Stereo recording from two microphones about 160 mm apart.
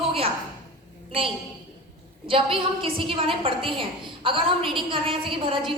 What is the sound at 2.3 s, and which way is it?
A woman's voice, 35° right (ahead or behind).